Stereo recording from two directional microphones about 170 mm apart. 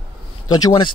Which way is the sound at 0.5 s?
25° left (ahead or behind).